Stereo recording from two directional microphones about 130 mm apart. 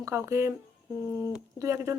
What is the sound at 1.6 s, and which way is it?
Speech, 25° right (ahead or behind).